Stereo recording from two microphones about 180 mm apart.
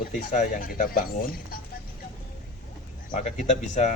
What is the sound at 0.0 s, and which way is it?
Speech, 50° left (ahead or behind).